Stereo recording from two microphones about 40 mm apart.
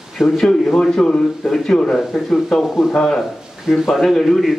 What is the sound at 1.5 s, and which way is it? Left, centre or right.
A man's voice, centre.